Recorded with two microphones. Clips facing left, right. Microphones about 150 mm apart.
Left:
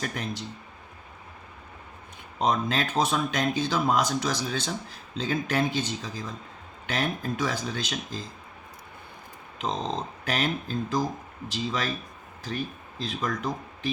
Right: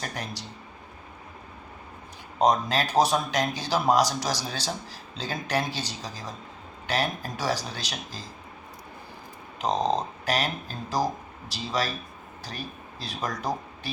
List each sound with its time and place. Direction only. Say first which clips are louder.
0.0 s speech: left 3 dB; 35° right (ahead or behind)
2.4 s speech: right 3 dB; 35° right (ahead or behind)
9.6 s speech: right 5 dB; 35° right (ahead or behind)